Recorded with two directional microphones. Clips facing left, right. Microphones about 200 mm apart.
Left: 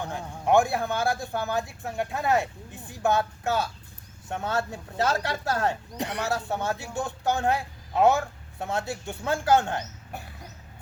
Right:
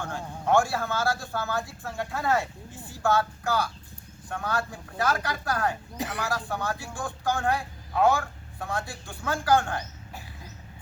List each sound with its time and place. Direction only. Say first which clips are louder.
0.0 s speech: left 1 dB; 15° left (ahead or behind)
6.0 s speech: left 1 dB; centre (ahead or behind)
6.2 s speech: left 3 dB; 25° left (ahead or behind)